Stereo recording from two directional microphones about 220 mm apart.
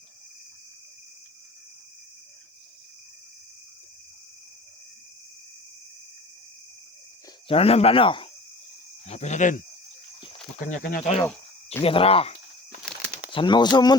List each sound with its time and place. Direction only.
7.4 s speech: 25° left (ahead or behind)
10.7 s speech: 40° left (ahead or behind)
11.8 s speech: 25° left (ahead or behind)
12.8 s bird flight: 5° left (ahead or behind)
13.3 s speech: 20° left (ahead or behind)